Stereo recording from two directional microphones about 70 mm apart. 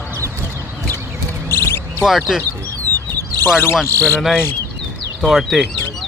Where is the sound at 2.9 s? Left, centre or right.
Right.